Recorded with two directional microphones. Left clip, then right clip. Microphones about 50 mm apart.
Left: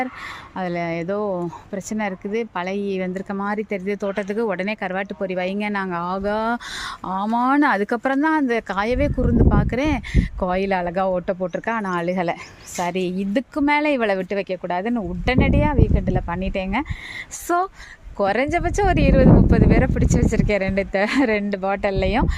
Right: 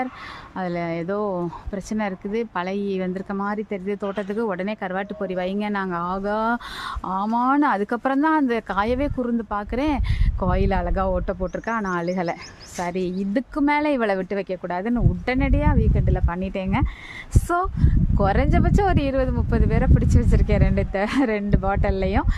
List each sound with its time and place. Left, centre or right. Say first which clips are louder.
0.6 s speech: left 2 dB; centre
3.3 s speech: left 3 dB; left
7.1 s speech: left 1 dB; centre
7.3 s speech: left 2 dB; left
8.0 s speech: right 1 dB; centre
12.2 s speech: left 3 dB; left
13.6 s speech: left 2 dB; centre
18.2 s speech: left 3 dB; left
20.9 s speech: left 3 dB; left